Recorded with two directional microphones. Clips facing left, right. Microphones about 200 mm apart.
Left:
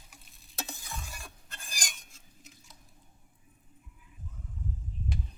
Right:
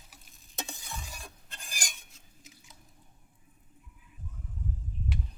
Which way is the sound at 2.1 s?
Centre (ahead or behind).